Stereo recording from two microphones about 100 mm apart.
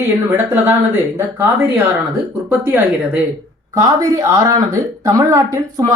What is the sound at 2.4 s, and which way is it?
Speech, 20° right (ahead or behind).